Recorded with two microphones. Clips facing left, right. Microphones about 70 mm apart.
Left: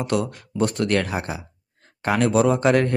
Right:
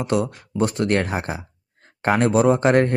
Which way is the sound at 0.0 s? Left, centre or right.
Right.